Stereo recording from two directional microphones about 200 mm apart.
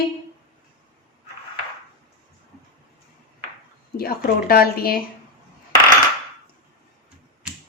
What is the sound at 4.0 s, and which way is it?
A woman's voice, 50° left (ahead or behind).